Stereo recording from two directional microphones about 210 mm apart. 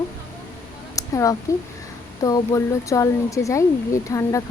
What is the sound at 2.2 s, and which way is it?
Speech, 15° left (ahead or behind).